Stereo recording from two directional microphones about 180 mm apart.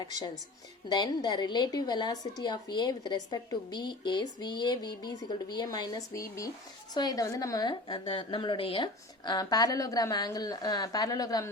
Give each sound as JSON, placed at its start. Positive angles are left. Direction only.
{"t": 0.0, "sound": "a woman's voice", "side_deg": 20}